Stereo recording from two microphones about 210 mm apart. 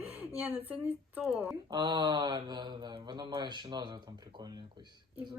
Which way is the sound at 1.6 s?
20° right (ahead or behind).